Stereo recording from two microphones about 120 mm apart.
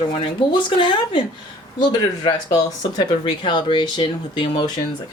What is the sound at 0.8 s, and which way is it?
Speech, 40° left (ahead or behind).